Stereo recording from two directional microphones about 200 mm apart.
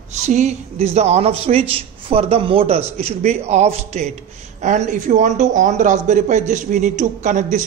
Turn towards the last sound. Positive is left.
turn(degrees=-40)  # may be behind; listen again after turning